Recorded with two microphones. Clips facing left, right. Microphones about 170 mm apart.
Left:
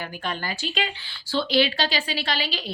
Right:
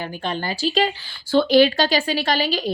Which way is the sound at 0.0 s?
30° right (ahead or behind).